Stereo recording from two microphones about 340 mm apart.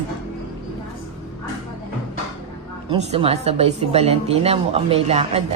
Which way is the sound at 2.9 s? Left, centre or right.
Centre.